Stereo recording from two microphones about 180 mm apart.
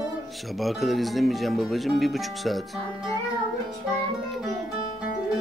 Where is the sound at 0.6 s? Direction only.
Centre (ahead or behind).